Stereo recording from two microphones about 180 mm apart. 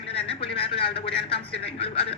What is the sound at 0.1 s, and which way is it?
A man's voice, 30° left (ahead or behind).